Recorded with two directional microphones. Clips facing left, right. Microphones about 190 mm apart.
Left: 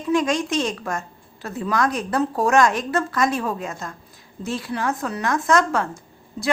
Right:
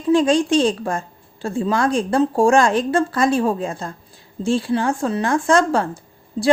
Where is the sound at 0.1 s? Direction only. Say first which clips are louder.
Right 6 dB; 30° right (ahead or behind).